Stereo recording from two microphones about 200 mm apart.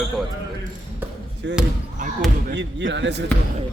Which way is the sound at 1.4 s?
60° right (ahead or behind).